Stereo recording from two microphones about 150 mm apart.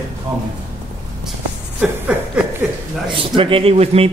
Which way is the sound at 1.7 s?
10° right (ahead or behind).